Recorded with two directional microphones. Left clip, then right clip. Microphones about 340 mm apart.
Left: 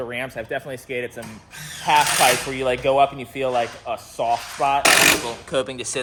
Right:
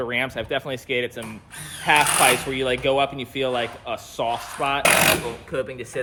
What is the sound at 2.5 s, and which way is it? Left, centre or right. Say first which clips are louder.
Speech: left 1 dB; centre.